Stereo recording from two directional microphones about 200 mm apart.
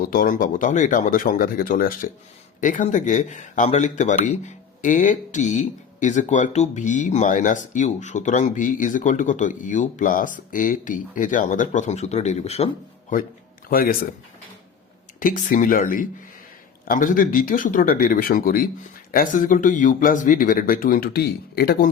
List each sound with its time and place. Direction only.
0.1 s speech: 45° left (ahead or behind)
13.7 s speech: 45° left (ahead or behind)
15.2 s speech: 40° left (ahead or behind)